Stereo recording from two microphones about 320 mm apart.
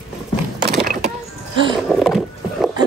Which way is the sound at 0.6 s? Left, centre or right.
Right.